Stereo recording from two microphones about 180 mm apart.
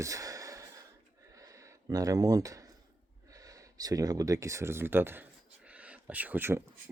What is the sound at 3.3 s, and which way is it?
Speech, 20° right (ahead or behind).